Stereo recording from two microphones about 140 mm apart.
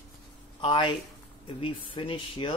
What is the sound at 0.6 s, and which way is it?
Speech, 35° left (ahead or behind).